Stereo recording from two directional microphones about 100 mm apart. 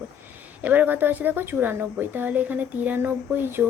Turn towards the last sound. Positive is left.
turn(degrees=-20)  # may be behind; listen again after turning